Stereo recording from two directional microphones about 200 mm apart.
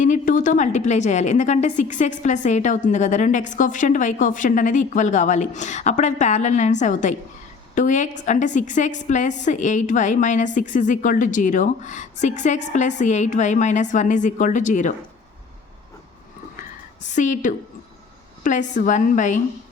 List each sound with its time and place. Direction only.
0.0 s a woman's voice: 40° left (ahead or behind)
17.2 s a woman's voice: 40° left (ahead or behind)